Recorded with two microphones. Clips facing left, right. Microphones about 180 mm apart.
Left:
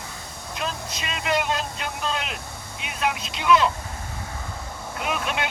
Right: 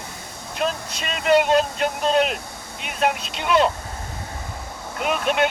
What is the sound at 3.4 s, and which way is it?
Speech, 40° right (ahead or behind).